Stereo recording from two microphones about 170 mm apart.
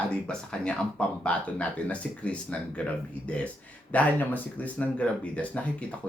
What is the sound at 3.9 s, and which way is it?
Speech, 10° left (ahead or behind).